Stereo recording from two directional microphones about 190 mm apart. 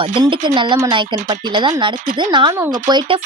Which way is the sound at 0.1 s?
25° right (ahead or behind).